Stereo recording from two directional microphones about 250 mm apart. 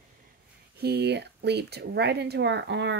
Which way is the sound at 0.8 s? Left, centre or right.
Right.